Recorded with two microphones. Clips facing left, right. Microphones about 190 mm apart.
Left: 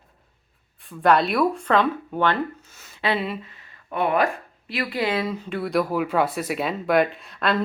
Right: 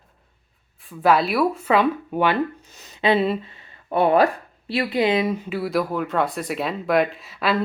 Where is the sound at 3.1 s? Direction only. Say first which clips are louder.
Right 7 dB; 30° right (ahead or behind).